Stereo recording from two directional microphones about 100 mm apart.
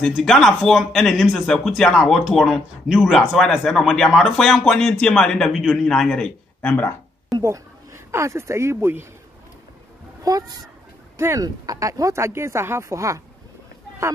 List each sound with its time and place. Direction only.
0.0 s speech: 5° left (ahead or behind)
7.4 s speech: 30° right (ahead or behind)
10.2 s speech: 40° right (ahead or behind)
11.1 s speech: 25° right (ahead or behind)